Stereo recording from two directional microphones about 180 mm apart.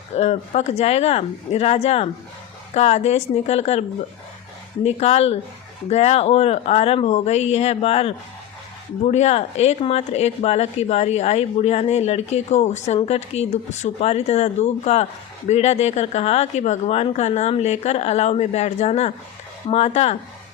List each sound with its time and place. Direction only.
0.2 s speech: 35° left (ahead or behind)